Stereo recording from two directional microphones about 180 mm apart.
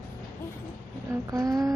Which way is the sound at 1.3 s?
20° right (ahead or behind).